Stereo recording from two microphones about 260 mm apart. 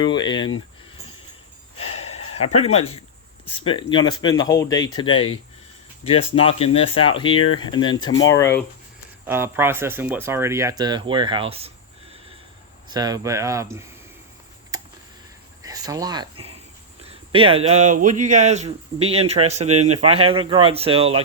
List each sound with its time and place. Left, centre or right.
0.0 s speech: centre
2.1 s speech: left
9.2 s speech: centre
12.9 s speech: centre
14.7 s a sound: centre
15.6 s speech: centre